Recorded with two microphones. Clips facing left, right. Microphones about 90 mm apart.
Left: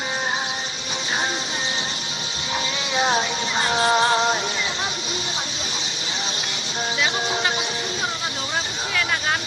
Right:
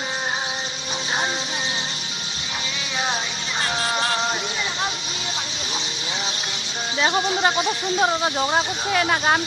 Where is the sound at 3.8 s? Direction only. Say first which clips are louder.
Left 7 dB; 25° left (ahead or behind).